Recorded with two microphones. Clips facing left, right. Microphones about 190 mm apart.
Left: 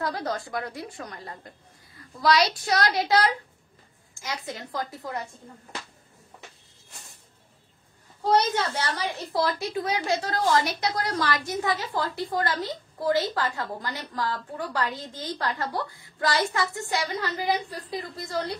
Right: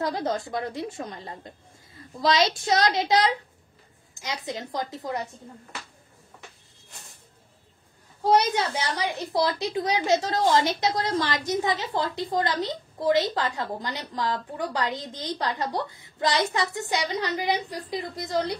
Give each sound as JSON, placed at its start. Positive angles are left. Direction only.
{"t": 0.0, "sound": "a woman's voice", "side_deg": -20}
{"t": 8.2, "sound": "a woman's voice", "side_deg": -15}